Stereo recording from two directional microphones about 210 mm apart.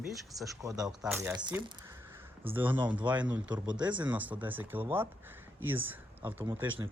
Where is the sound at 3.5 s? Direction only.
20° right (ahead or behind).